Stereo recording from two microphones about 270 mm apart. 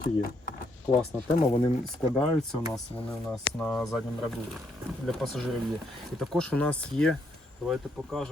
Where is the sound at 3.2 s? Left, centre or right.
Centre.